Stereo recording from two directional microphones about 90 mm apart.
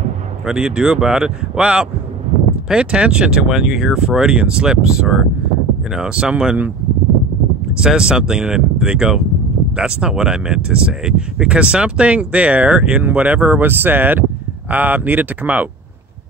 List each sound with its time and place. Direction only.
0.5 s speech: 10° right (ahead or behind)
7.7 s speech: 10° right (ahead or behind)